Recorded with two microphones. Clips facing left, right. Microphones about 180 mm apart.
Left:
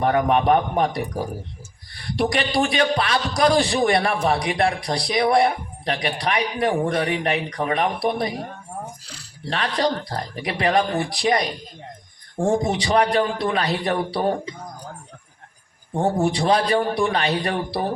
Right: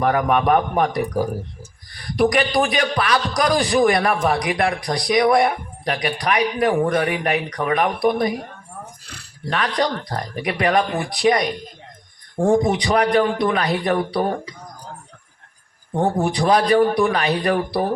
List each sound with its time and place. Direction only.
0.0 s speech: 30° left (ahead or behind)
1.9 s a sound: 30° left (ahead or behind)
2.3 s speech: 30° left (ahead or behind)
9.5 s speech: 30° left (ahead or behind)
12.7 s speech: 30° left (ahead or behind)
16.0 s speech: 30° left (ahead or behind)